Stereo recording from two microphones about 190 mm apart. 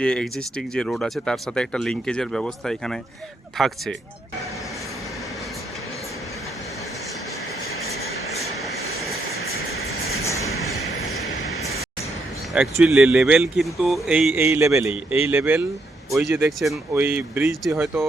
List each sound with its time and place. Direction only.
0.0 s speech: 5° left (ahead or behind)
9.6 s train: 55° left (ahead or behind)
10.2 s train: 15° left (ahead or behind)
11.3 s a sound: 35° left (ahead or behind)
12.5 s speech: 5° right (ahead or behind)
16.9 s speech: 10° right (ahead or behind)